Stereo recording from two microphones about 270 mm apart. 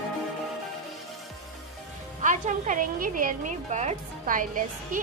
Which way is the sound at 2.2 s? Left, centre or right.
Right.